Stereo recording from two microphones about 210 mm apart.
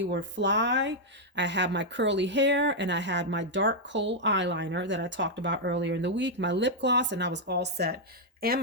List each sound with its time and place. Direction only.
0.0 s speech: 60° right (ahead or behind)